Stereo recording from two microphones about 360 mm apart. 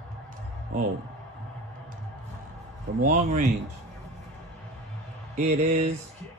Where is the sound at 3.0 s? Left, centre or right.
Centre.